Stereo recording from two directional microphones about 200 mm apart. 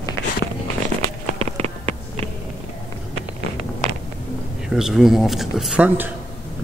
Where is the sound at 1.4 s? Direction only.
30° right (ahead or behind).